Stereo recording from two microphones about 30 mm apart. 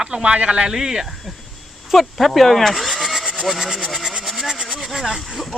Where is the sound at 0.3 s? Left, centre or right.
Right.